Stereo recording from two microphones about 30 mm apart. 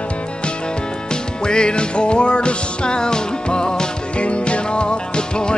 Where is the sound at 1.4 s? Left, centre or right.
Left.